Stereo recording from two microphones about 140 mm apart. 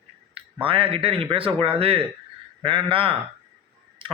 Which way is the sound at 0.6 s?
40° right (ahead or behind).